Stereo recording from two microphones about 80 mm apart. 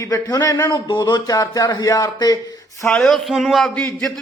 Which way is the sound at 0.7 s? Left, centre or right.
Left.